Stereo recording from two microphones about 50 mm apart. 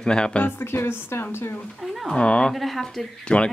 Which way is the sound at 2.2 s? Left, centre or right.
Left.